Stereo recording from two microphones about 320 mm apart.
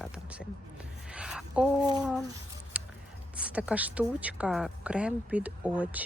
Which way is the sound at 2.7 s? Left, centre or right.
Centre.